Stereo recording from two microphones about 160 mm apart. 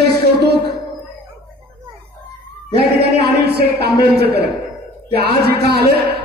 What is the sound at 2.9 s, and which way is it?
Speech, 85° right.